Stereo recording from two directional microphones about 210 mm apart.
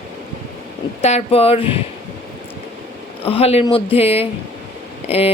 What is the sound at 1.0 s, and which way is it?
Speech, 30° left (ahead or behind).